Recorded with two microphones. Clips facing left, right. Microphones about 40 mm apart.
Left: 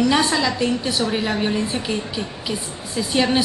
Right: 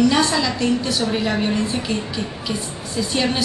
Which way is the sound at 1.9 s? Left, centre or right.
Centre.